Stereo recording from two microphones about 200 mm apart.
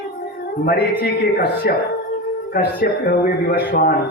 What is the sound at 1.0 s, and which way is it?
A man's voice, 55° left (ahead or behind).